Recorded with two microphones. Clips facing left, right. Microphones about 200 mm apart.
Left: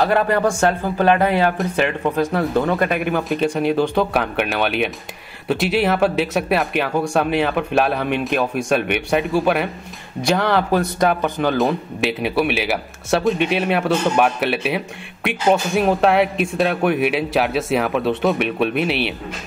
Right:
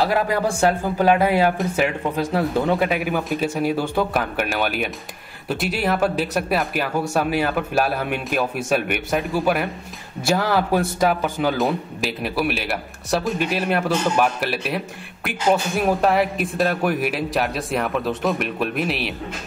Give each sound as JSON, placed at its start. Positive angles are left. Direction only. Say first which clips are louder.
{"t": 0.0, "sound": "speech", "louder": "left 3 dB", "side_deg": -10}